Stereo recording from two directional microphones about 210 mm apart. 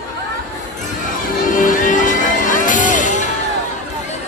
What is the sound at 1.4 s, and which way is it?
Music, 40° left (ahead or behind).